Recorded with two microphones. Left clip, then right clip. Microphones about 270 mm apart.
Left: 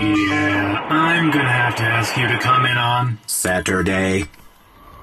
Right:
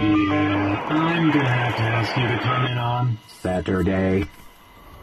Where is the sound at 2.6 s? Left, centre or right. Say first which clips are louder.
Left 8 dB; left.